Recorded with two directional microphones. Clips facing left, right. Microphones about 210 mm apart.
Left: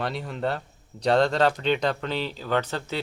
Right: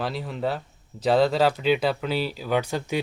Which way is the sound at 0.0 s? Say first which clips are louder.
Right 1 dB; centre (ahead or behind).